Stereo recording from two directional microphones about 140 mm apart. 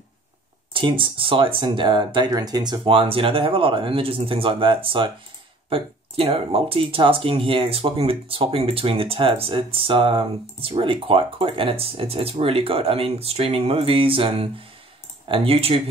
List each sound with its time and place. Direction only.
0.7 s speech: 35° right (ahead or behind)